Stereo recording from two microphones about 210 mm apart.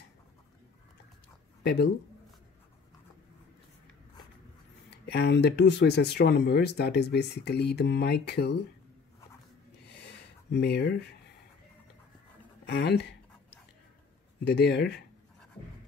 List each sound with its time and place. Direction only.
1.6 s speech: 50° left (ahead or behind)
5.0 s speech: 50° left (ahead or behind)
9.8 s a sound: 55° left (ahead or behind)
12.6 s speech: 55° left (ahead or behind)
14.4 s speech: 50° left (ahead or behind)